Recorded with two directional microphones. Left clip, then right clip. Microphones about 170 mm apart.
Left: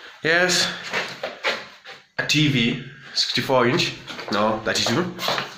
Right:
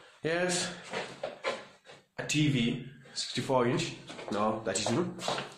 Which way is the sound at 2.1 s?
15° left (ahead or behind).